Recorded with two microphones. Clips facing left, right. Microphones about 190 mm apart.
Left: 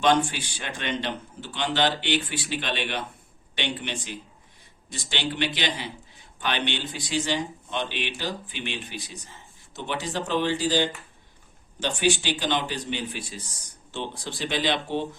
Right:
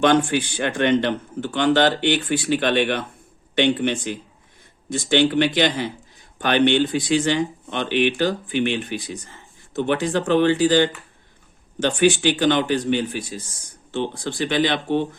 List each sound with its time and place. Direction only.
0.0 s a man's voice: 55° right (ahead or behind)